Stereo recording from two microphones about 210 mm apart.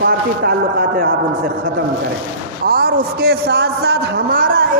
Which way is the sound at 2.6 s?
50° right (ahead or behind).